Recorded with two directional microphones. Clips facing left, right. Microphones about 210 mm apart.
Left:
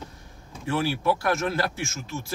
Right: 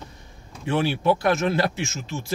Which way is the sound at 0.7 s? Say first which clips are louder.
Right 3 dB; 20° right (ahead or behind).